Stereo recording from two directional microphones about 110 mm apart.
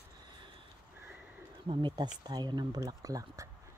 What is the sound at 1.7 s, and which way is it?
Speech, 45° right (ahead or behind).